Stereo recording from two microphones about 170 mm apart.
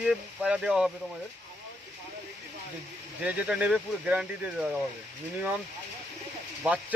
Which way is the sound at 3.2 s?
5° right (ahead or behind).